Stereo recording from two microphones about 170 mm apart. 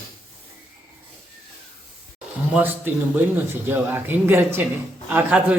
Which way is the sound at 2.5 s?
10° right (ahead or behind).